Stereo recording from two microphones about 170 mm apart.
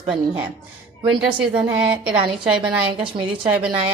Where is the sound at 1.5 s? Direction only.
5° right (ahead or behind).